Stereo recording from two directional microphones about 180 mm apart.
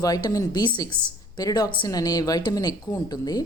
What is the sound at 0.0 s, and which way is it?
A woman's voice, 20° left (ahead or behind).